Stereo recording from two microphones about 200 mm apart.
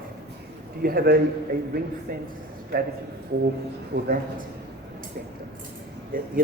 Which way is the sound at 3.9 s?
40° right (ahead or behind).